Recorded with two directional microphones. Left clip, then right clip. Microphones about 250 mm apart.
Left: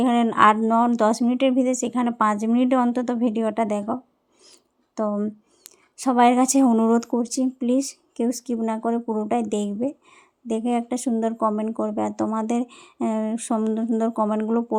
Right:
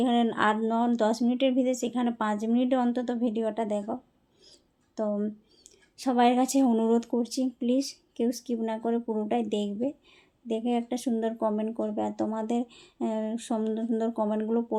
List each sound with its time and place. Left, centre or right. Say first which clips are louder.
0.0 s speech: left 8 dB; left